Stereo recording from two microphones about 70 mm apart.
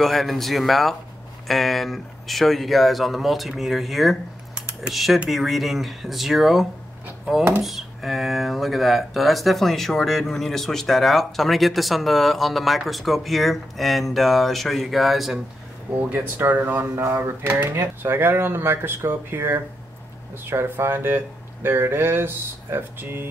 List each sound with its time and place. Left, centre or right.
0.0 s speech: centre
4.6 s typing: centre
4.9 s speech: centre
16.0 s speech: right
16.9 s a sound: right
17.6 s speech: right